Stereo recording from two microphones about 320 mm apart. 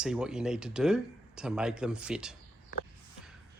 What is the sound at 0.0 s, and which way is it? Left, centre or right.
Speech, centre.